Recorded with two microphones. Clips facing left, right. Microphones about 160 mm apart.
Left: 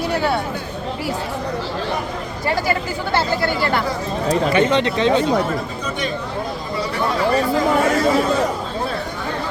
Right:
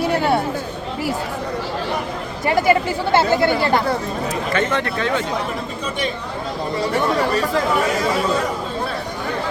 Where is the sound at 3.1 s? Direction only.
20° right (ahead or behind).